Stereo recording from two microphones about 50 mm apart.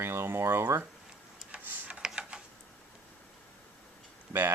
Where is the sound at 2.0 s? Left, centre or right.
Centre.